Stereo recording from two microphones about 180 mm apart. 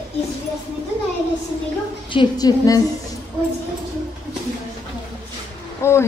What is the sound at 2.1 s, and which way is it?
Speech, 25° left (ahead or behind).